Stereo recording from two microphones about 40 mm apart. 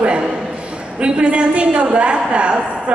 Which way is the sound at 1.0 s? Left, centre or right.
Right.